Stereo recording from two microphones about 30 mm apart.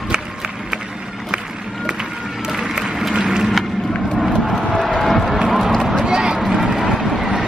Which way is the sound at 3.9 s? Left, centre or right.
Left.